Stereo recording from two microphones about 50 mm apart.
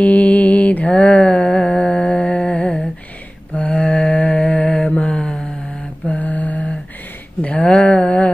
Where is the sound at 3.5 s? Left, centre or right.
Left.